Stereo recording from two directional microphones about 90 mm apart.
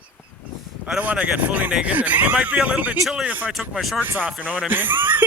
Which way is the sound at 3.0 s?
5° right (ahead or behind).